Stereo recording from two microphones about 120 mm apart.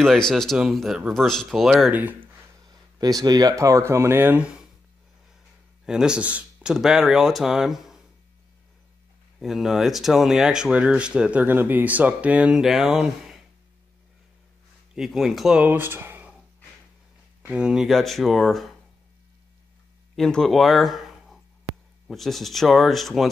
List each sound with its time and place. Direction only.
0.3 s speech: centre (ahead or behind)
1.9 s speech: 15° right (ahead or behind)
2.7 s speech: 30° right (ahead or behind); by 4.5 s 15° right (ahead or behind)
5.9 s speech: 5° right (ahead or behind)
9.4 s speech: centre (ahead or behind)
15.0 s speech: centre (ahead or behind)
15.7 s speech: 15° right (ahead or behind)
17.5 s speech: 5° right (ahead or behind)
20.2 s speech: 5° left (ahead or behind)